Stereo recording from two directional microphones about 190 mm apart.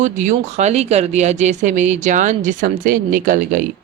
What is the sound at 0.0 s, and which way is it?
Speech, 40° right (ahead or behind).